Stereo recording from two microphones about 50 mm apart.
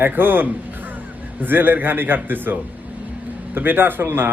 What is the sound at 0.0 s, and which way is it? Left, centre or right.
A man's voice, right.